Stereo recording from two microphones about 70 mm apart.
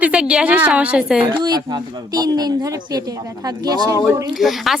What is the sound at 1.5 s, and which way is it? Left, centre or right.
Speech, right.